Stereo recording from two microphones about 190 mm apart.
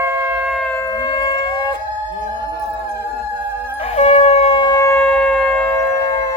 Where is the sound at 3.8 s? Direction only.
35° left (ahead or behind); by 5.7 s 5° left (ahead or behind).